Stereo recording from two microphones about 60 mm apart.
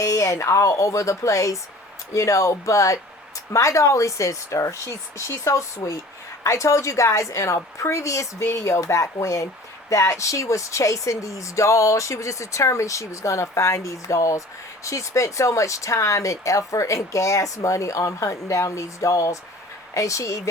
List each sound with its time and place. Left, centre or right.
0.0 s speech: left